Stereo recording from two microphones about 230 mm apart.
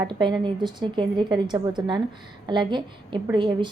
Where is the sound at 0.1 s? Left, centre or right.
Centre.